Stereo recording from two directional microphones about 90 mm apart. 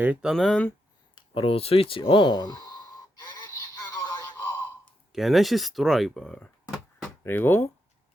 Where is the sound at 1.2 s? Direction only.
85° left; by 2.7 s 50° left (ahead or behind).